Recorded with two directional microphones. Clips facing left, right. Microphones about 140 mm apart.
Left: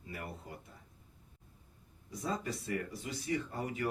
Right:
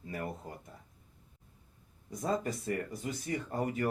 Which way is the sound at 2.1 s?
50° right (ahead or behind).